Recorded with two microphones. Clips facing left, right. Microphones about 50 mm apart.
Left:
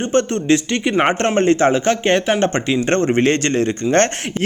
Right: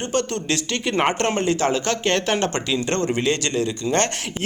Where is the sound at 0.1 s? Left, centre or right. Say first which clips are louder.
Left 8 dB; left.